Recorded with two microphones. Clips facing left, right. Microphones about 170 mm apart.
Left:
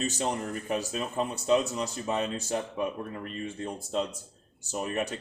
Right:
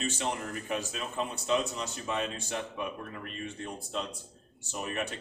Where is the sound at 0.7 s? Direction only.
40° left (ahead or behind).